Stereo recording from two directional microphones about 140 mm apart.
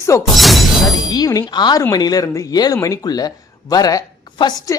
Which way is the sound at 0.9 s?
30° left (ahead or behind).